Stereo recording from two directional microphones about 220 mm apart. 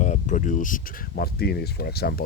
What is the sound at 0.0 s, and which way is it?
Speech, 35° left (ahead or behind).